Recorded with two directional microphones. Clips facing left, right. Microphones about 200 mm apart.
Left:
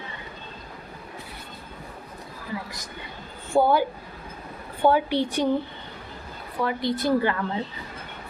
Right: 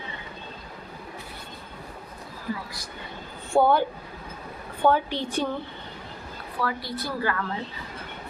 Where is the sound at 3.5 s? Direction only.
25° right (ahead or behind).